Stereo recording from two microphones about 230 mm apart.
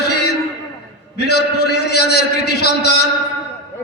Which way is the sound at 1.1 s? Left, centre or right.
Left.